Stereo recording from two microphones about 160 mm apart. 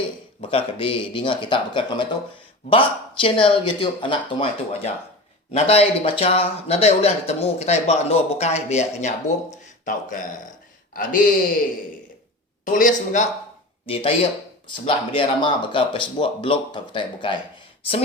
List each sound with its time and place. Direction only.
0.4 s speech: 35° left (ahead or behind); by 11.2 s 60° left (ahead or behind)
12.6 s speech: 55° left (ahead or behind)
13.8 s speech: 35° left (ahead or behind)